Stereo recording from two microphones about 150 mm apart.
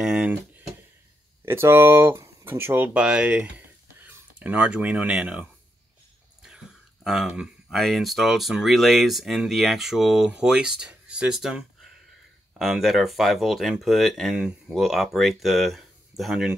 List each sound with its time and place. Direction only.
0.0 s speech: 5° right (ahead or behind)
1.4 s speech: 15° right (ahead or behind)